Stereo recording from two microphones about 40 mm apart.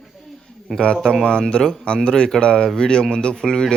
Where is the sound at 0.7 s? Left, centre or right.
Centre.